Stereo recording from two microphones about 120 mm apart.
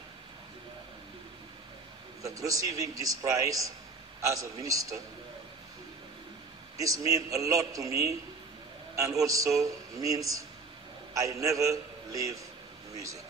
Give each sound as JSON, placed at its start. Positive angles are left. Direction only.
{"t": 2.2, "sound": "a man's voice", "side_deg": -30}
{"t": 6.8, "sound": "a man's voice", "side_deg": -30}